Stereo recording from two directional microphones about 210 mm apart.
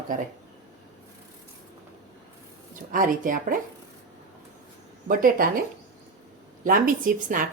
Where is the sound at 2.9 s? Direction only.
40° right (ahead or behind).